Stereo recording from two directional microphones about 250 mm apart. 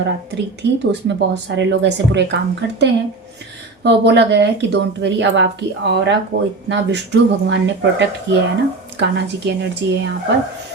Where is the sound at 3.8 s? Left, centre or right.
Right.